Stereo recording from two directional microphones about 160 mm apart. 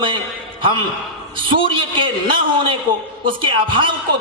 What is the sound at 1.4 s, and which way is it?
A man's voice, 30° right (ahead or behind).